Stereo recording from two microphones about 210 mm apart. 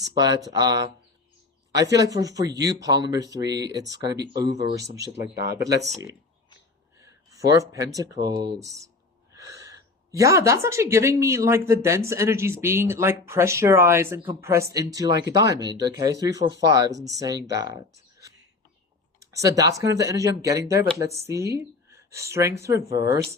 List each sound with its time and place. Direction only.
0.0 s speech: 20° right (ahead or behind)
7.0 s speech: 15° right (ahead or behind)